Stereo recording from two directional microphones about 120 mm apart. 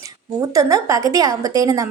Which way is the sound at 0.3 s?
25° right (ahead or behind).